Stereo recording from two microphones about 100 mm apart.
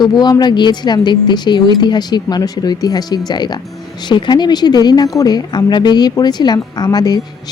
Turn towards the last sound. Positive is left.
turn(degrees=40)  # may be behind; listen again after turning